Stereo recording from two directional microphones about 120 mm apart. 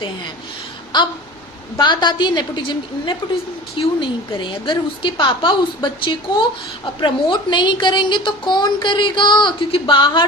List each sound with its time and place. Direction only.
0.9 s a woman's voice: 40° left (ahead or behind)